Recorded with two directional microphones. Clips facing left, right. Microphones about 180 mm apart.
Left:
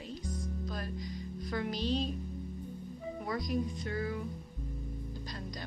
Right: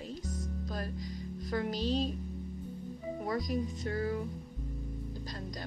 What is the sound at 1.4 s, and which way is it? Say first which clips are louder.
Music: right 1 dB; 40° right (ahead or behind).